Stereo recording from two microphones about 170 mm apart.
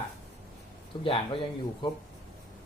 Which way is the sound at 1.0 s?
30° left (ahead or behind).